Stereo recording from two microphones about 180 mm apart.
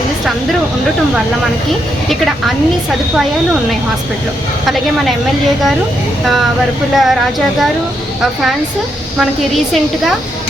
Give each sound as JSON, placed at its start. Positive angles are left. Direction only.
{"t": 4.6, "sound": "a woman's voice", "side_deg": 0}
{"t": 6.9, "sound": "a woman's voice", "side_deg": 0}